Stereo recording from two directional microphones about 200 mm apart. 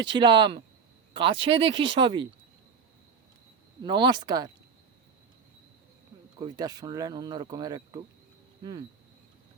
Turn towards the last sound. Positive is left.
turn(degrees=-20)  # may be behind; listen again after turning